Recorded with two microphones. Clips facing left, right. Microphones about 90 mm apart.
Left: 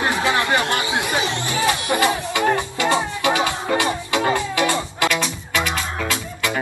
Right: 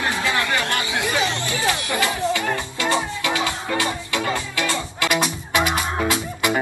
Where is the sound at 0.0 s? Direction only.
25° left (ahead or behind).